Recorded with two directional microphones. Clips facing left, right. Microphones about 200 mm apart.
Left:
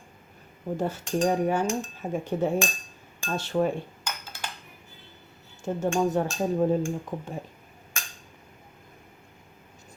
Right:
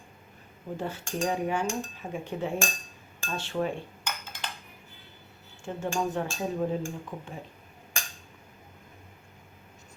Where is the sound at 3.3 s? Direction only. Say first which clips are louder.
Left 5 dB; 40° left (ahead or behind).